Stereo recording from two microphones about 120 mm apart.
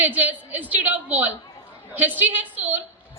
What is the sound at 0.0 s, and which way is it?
A woman's voice, 15° right (ahead or behind).